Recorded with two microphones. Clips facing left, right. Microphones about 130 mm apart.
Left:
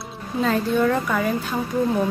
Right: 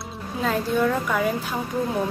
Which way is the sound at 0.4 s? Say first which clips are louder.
Left 2 dB; 5° right (ahead or behind).